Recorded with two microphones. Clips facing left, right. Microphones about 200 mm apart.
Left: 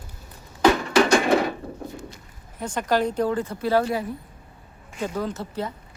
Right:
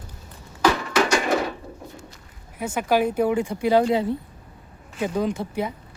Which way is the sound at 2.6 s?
10° right (ahead or behind).